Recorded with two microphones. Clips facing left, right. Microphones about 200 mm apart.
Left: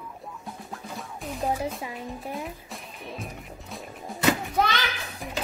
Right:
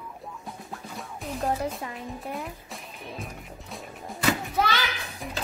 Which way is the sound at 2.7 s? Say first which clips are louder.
Left 1 dB; centre (ahead or behind).